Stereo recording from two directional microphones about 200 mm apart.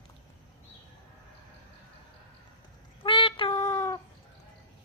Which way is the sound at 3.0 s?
25° left (ahead or behind).